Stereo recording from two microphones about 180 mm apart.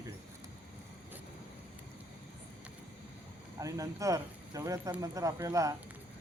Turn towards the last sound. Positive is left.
turn(degrees=-15)  # may be behind; listen again after turning